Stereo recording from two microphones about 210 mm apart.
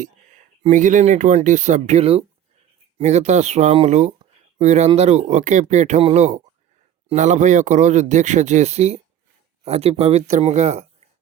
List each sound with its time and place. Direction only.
0.6 s speech: 35° right (ahead or behind)